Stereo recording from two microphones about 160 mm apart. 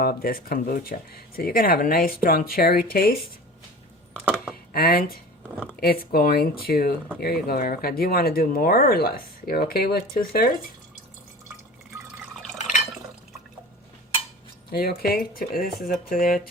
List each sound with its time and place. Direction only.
0.0 s speech: 65° left (ahead or behind)
4.7 s speech: 65° left (ahead or behind)
14.7 s speech: 70° left (ahead or behind)